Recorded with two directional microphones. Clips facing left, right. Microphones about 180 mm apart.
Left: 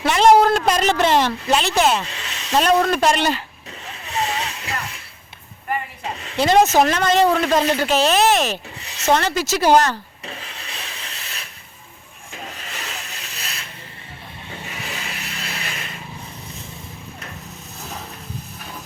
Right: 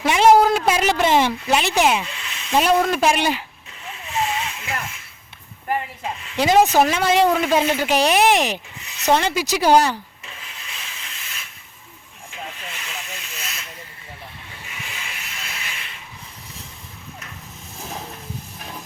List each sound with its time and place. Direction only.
0.0 s a sound: 10° right (ahead or behind)
0.4 s speech: 5° right (ahead or behind)
2.0 s a sound: 35° left (ahead or behind)
2.5 s speech: 5° right (ahead or behind)
4.1 s a sound: 35° left (ahead or behind)
6.3 s speech: 10° right (ahead or behind)
10.2 s rub: 35° left (ahead or behind)
12.3 s hiss: 40° left (ahead or behind)
14.7 s rub: 35° left (ahead or behind)